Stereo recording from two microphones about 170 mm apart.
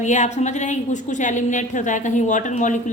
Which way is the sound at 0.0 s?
45° left (ahead or behind).